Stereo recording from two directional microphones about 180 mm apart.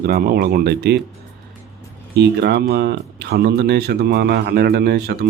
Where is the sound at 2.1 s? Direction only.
70° right (ahead or behind).